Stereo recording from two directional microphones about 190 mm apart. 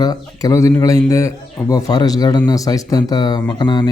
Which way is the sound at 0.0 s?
20° left (ahead or behind).